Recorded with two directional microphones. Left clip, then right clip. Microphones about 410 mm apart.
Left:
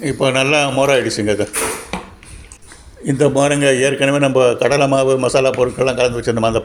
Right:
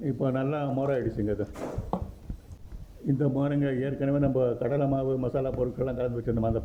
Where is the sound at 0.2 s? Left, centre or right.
Right.